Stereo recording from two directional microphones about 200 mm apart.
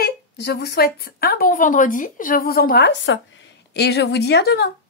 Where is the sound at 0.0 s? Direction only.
55° left (ahead or behind).